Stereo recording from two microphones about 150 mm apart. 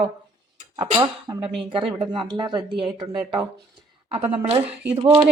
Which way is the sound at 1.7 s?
35° right (ahead or behind).